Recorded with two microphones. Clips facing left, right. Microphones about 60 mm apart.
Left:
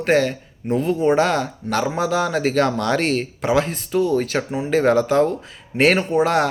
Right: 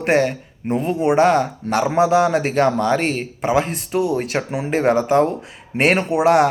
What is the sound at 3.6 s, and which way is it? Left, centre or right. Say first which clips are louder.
Speech: even; right.